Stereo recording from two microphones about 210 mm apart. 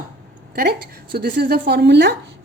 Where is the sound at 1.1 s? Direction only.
45° right (ahead or behind).